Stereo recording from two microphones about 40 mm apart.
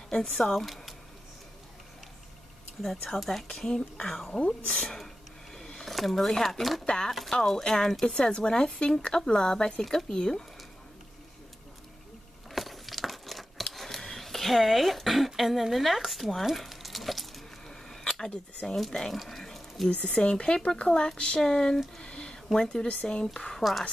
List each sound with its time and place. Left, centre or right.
0.1 s speech: centre
2.8 s speech: centre
3.6 s speech: centre
8.1 s speech: left
12.4 s a sound: centre
13.7 s speech: centre
16.5 s a sound: centre
18.3 s speech: left
18.9 s speech: centre
19.9 s speech: left
22.0 s a sound: left
22.5 s speech: centre